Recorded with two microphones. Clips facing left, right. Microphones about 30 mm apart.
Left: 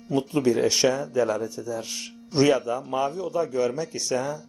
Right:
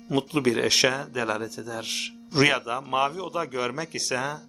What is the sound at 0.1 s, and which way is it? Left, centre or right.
Speech, right.